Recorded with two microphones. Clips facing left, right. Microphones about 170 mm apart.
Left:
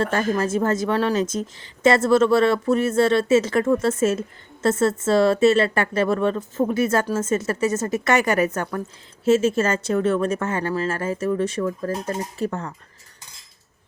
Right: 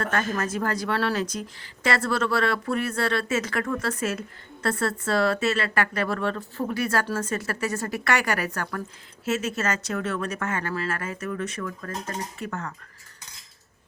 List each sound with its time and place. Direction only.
0.0 s speech: 30° left (ahead or behind)